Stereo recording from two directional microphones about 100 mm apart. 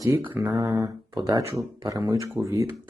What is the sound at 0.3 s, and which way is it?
Speech, 30° right (ahead or behind).